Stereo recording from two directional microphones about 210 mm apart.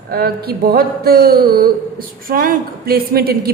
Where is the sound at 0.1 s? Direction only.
45° right (ahead or behind).